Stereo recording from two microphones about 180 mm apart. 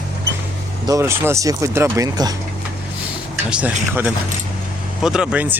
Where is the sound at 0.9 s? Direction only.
15° right (ahead or behind).